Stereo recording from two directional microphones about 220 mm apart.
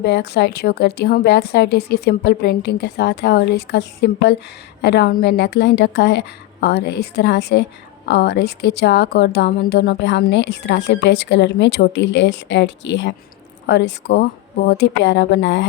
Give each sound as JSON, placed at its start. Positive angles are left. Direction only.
{"t": 0.0, "sound": "speech", "side_deg": 50}